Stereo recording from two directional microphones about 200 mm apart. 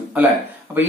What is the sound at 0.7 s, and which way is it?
Speech, 10° right (ahead or behind).